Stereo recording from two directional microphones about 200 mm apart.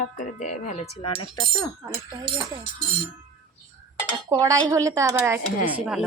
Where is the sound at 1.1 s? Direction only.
20° left (ahead or behind).